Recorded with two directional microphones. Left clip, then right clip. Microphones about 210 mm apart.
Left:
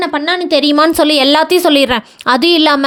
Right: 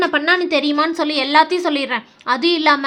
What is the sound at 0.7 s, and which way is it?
A woman's voice, 45° left (ahead or behind).